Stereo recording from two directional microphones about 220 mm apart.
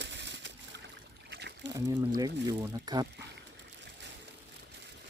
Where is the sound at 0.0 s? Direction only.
55° right (ahead or behind).